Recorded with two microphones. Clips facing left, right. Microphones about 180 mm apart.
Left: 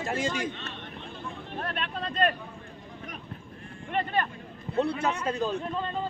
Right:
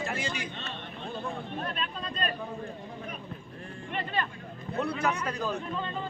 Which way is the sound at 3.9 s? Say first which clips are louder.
Left 5 dB; 50° left (ahead or behind).